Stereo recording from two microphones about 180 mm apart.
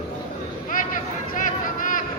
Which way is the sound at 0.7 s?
50° left (ahead or behind).